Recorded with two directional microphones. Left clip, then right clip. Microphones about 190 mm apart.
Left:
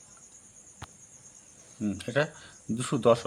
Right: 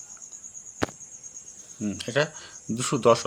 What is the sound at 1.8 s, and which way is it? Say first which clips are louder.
Cricket: right 3 dB; 5° right (ahead or behind).